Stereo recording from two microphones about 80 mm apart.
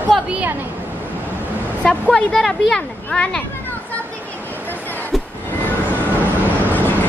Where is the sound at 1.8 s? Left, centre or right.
Centre.